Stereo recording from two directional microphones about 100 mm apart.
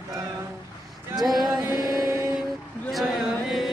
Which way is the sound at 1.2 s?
Centre (ahead or behind).